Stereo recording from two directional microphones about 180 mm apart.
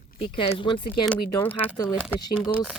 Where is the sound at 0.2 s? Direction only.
30° left (ahead or behind).